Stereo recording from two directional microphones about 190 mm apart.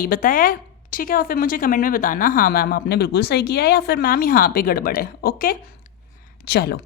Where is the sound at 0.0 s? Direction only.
50° left (ahead or behind).